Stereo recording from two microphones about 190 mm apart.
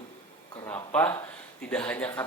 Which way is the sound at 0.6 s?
10° left (ahead or behind).